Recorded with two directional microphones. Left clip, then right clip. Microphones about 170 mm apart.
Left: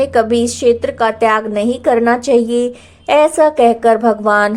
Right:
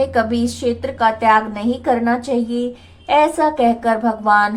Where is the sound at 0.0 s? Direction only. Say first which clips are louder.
Left 5 dB; 35° left (ahead or behind).